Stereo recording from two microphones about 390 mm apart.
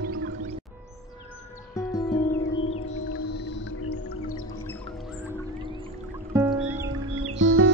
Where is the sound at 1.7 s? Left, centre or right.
Centre.